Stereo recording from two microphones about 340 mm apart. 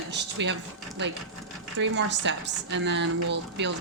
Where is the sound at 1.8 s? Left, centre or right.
Right.